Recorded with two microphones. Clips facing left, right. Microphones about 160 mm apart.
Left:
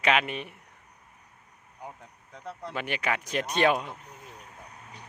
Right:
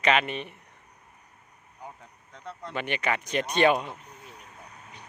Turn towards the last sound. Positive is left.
turn(degrees=0)  # may be behind; listen again after turning